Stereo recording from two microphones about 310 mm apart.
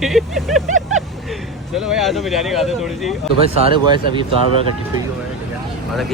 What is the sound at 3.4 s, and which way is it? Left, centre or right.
Speech, centre.